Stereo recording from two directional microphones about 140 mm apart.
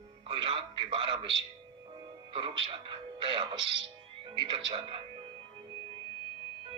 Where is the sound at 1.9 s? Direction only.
35° right (ahead or behind).